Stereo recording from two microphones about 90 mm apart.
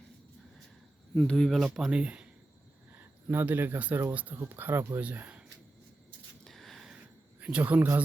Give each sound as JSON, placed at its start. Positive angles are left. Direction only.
{"t": 1.1, "sound": "speech", "side_deg": 10}
{"t": 3.2, "sound": "speech", "side_deg": -20}
{"t": 6.4, "sound": "a sound", "side_deg": 5}
{"t": 7.4, "sound": "speech", "side_deg": -15}